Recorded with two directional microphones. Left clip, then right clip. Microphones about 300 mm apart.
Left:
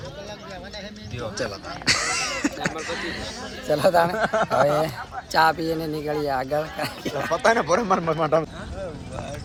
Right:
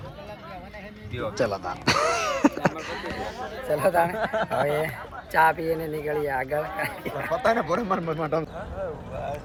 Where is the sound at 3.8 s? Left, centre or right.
Centre.